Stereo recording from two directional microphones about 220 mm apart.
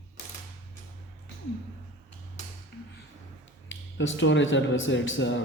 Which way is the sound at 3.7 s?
60° left (ahead or behind).